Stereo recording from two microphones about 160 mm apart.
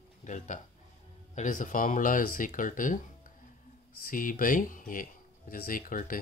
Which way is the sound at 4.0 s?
60° left (ahead or behind).